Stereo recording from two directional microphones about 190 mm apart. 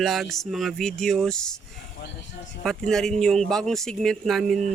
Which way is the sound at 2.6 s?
5° left (ahead or behind).